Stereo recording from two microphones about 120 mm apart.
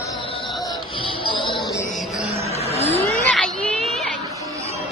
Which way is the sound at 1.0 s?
45° left (ahead or behind).